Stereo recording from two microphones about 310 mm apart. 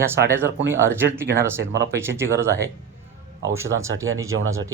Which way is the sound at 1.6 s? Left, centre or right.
Right.